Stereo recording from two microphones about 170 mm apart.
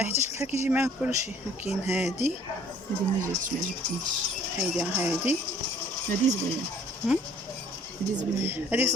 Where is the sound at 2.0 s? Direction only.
40° left (ahead or behind).